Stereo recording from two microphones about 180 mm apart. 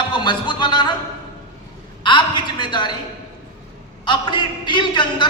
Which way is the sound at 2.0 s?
25° left (ahead or behind).